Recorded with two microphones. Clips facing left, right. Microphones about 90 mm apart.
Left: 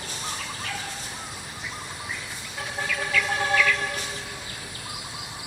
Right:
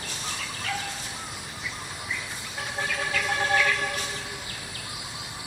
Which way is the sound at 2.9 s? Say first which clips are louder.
Left 2 dB; 40° right (ahead or behind).